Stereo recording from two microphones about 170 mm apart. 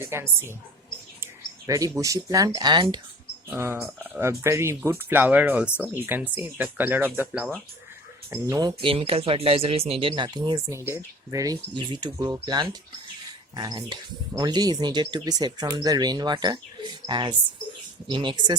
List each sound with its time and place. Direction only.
0.0 s speech: 15° right (ahead or behind)
3.5 s speech: 15° right (ahead or behind)
8.3 s speech: 20° right (ahead or behind)